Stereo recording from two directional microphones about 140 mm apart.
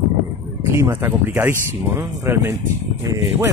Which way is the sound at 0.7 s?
15° right (ahead or behind).